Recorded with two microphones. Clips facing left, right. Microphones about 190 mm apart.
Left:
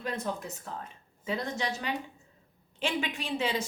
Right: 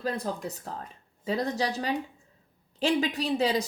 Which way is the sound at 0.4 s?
35° right (ahead or behind).